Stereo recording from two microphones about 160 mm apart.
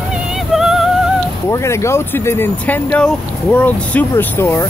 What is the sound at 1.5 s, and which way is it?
Speech, 15° left (ahead or behind).